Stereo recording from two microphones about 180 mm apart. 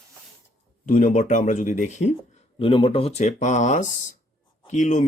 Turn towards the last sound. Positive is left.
turn(degrees=40)  # may be behind; listen again after turning